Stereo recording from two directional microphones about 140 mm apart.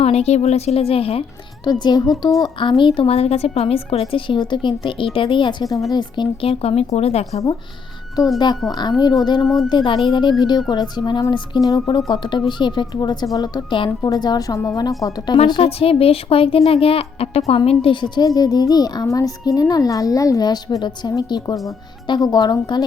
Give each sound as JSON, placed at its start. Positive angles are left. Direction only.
{"t": 0.0, "sound": "speech", "side_deg": 50}
{"t": 1.8, "sound": "a woman's voice", "side_deg": 30}
{"t": 8.4, "sound": "a child's voice", "side_deg": 30}
{"t": 15.4, "sound": "a woman's voice", "side_deg": 40}